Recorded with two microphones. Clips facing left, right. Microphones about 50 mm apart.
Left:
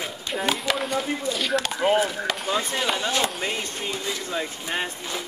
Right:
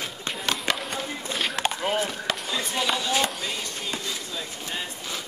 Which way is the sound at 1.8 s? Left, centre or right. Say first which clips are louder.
Left 5 dB; centre.